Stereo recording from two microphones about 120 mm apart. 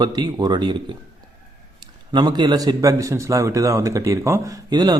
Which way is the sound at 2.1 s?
35° right (ahead or behind).